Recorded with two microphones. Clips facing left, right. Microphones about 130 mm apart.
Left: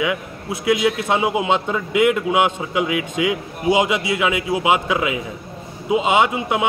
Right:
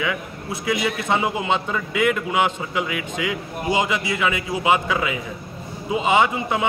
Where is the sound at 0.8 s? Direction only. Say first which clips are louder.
Left 3 dB; 10° left (ahead or behind).